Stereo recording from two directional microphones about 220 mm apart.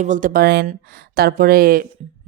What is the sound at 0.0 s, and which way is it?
A woman's voice, 35° right (ahead or behind).